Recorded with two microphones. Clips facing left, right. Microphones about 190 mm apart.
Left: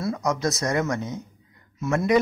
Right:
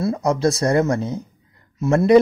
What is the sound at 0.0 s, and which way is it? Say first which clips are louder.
Speech: right 6 dB; 30° right (ahead or behind).